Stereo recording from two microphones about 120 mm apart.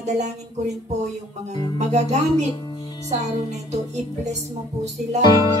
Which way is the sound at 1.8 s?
70° right (ahead or behind).